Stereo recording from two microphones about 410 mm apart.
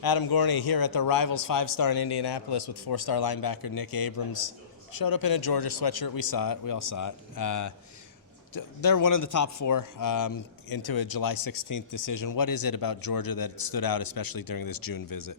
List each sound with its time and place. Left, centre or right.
0.0 s speech: left